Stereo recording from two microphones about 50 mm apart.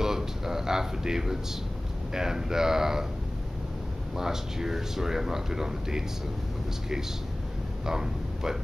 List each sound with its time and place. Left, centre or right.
0.0 s a sound: centre
2.1 s speech: centre
4.2 s speech: centre
7.8 s speech: centre